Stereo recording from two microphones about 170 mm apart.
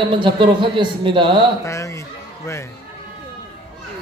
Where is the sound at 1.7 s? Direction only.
20° left (ahead or behind).